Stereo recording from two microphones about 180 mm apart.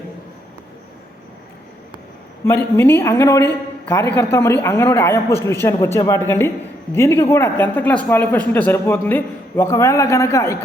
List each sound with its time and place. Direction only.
2.4 s speech: 10° left (ahead or behind)